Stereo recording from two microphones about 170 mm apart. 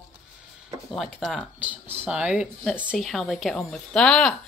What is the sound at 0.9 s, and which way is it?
Speech, centre (ahead or behind).